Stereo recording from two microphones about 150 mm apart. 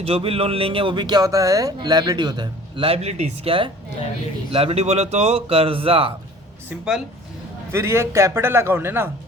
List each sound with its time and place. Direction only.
0.0 s speech: 40° right (ahead or behind)
6.7 s speech: 5° right (ahead or behind)
7.7 s a man's voice: 20° right (ahead or behind)